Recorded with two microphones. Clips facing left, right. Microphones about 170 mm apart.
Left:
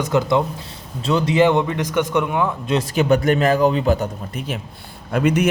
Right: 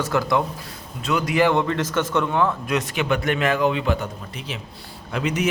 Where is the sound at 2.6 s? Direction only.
35° left (ahead or behind).